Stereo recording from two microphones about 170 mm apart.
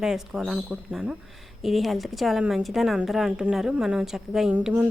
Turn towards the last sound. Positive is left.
turn(degrees=-10)  # may be behind; listen again after turning